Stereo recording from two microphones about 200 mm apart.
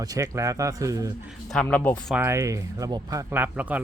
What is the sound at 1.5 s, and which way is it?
Speech, 5° left (ahead or behind).